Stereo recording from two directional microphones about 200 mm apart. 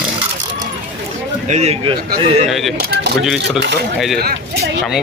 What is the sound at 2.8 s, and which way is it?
Speech, 50° right (ahead or behind).